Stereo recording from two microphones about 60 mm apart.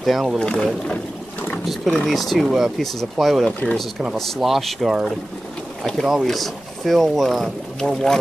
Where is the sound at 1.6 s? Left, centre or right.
Centre.